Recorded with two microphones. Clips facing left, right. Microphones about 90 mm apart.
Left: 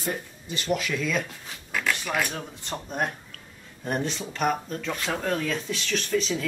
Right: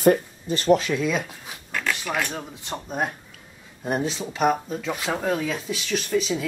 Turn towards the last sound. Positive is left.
turn(degrees=-5)  # may be behind; listen again after turning